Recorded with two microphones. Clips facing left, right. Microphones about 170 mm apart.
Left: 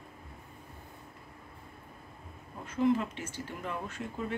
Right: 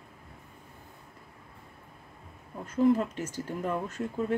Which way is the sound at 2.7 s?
45° right (ahead or behind).